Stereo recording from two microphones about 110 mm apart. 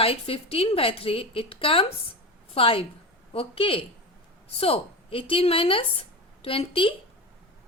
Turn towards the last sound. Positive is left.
turn(degrees=55)  # may be behind; listen again after turning